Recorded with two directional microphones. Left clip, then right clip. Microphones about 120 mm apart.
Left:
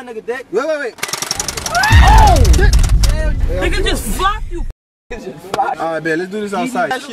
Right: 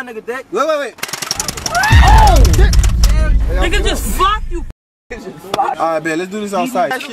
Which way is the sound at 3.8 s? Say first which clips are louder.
Right 3 dB; 15° right (ahead or behind).